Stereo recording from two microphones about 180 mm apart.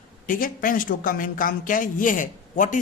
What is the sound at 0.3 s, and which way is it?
Speech, 50° left (ahead or behind).